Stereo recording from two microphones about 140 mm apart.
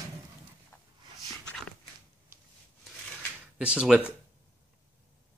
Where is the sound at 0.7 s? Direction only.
15° left (ahead or behind).